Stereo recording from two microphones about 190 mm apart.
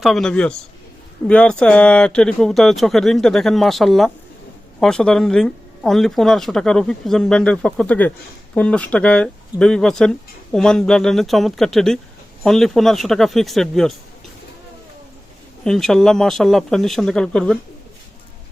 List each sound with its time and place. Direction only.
0.0 s speech: centre (ahead or behind)
15.6 s speech: 5° left (ahead or behind)